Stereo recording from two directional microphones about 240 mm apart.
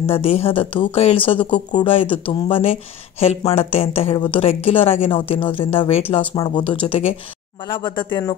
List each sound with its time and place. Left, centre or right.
0.0 s speech: left